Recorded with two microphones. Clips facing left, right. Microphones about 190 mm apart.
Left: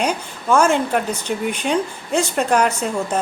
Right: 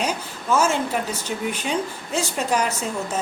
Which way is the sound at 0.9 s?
55° left (ahead or behind).